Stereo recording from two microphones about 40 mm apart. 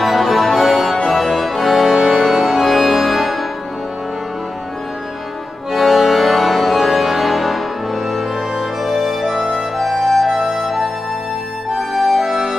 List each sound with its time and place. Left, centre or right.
0.0 s music: centre
5.7 s music: centre
11.9 s music: centre